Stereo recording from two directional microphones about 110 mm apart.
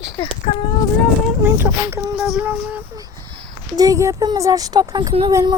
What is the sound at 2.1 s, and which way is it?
Speech, 5° right (ahead or behind).